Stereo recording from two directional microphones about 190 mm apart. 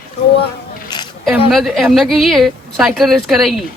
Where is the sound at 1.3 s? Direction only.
Centre (ahead or behind).